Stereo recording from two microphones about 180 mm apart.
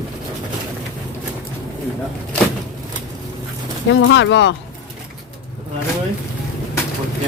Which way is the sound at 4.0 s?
90° left.